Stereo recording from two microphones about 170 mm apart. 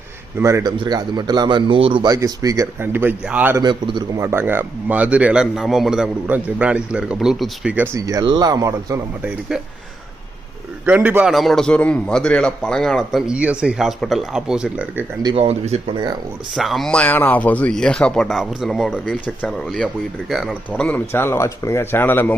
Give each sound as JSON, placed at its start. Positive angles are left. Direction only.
{"t": 0.3, "sound": "a man's voice", "side_deg": -15}
{"t": 3.6, "sound": "a man's voice", "side_deg": -25}
{"t": 4.2, "sound": "speech", "side_deg": -15}
{"t": 7.9, "sound": "a man's voice", "side_deg": -20}
{"t": 10.8, "sound": "a man's voice", "side_deg": -10}
{"t": 15.2, "sound": "speech", "side_deg": -30}
{"t": 16.6, "sound": "a man's voice", "side_deg": 0}